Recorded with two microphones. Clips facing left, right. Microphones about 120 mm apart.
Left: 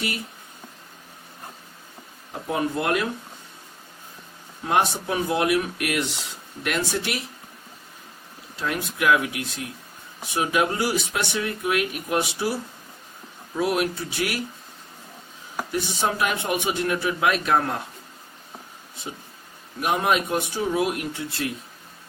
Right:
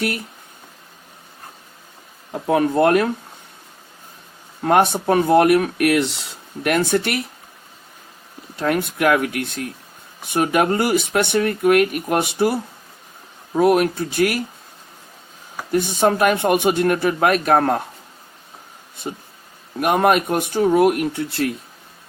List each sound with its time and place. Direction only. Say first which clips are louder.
2.5 s speech: right 9 dB; 60° right (ahead or behind)
4.6 s speech: right 7 dB; 55° right (ahead or behind)
8.5 s speech: right 7 dB; 55° right (ahead or behind)
15.7 s speech: right 9 dB; 55° right (ahead or behind)
19.8 s speech: right 6 dB; 55° right (ahead or behind)